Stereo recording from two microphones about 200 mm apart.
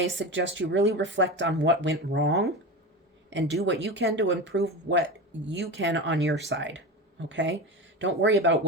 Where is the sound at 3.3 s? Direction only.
65° right (ahead or behind).